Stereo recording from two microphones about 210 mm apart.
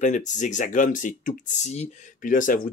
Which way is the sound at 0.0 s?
35° left (ahead or behind).